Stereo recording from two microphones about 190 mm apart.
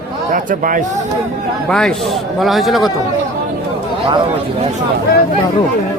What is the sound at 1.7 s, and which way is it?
Speech, 5° left (ahead or behind).